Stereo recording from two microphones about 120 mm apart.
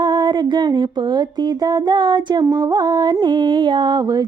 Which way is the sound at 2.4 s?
30° right (ahead or behind).